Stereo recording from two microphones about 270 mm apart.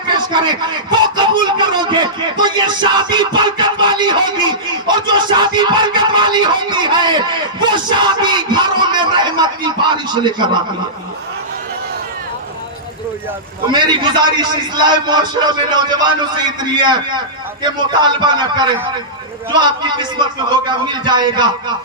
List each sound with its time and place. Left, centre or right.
0.3 s speech: centre
13.8 s speech: centre
20.5 s speech: centre